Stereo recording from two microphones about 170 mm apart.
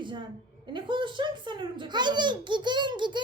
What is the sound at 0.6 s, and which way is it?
A child's voice, 30° right (ahead or behind).